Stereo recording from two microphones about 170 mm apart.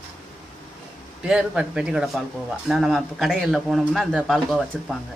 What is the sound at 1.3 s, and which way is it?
Speech, 5° right (ahead or behind).